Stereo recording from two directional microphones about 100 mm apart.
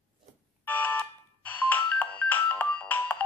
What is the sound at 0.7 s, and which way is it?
Ringtone, 20° left (ahead or behind).